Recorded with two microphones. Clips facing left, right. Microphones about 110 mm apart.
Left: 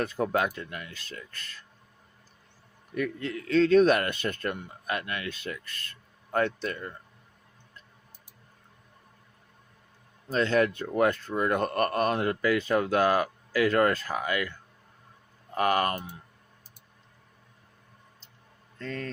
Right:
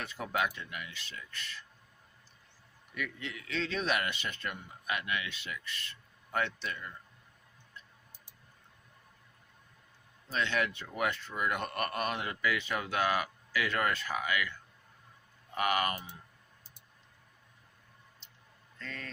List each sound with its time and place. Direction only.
0.0 s speech: 45° left (ahead or behind)
2.9 s speech: 40° left (ahead or behind)
10.2 s speech: 40° left (ahead or behind)
15.5 s speech: 35° left (ahead or behind)
18.8 s a man's voice: 40° left (ahead or behind)